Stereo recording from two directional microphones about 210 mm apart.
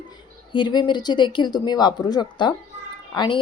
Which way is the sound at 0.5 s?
20° left (ahead or behind).